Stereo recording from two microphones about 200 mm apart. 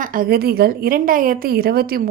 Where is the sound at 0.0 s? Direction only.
45° right (ahead or behind).